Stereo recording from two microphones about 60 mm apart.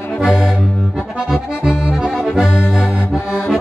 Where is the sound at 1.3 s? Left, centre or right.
Centre.